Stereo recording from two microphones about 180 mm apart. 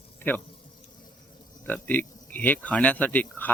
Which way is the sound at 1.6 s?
10° left (ahead or behind).